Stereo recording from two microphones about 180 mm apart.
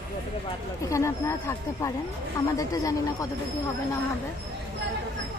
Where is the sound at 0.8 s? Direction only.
15° left (ahead or behind).